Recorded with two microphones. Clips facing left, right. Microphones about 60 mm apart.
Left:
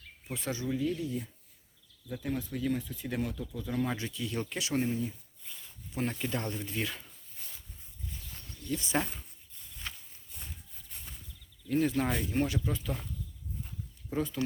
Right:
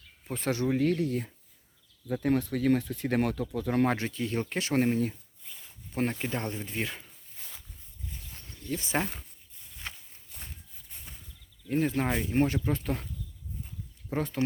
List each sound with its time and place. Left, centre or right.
0.3 s speech: right
4.8 s speech: right
5.9 s speech: right
8.3 s cricket: right
9.8 s walk: right
11.7 s speech: right
14.1 s speech: right